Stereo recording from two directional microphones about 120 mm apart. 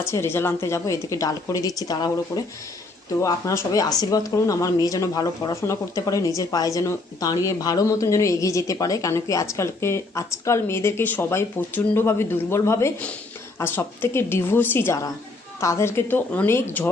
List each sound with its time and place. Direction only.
0.0 s a woman's voice: 20° left (ahead or behind)